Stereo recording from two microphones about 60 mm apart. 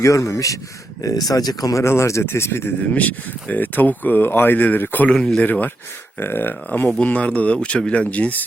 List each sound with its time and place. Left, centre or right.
0.0 s a man's voice: left
1.0 s speech: left
1.8 s speech: left
2.9 s speech: left
5.1 s speech: centre
5.4 s speech: left
7.0 s speech: left